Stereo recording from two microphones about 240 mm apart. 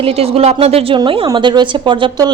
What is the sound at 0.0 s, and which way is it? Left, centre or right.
A woman's voice, right.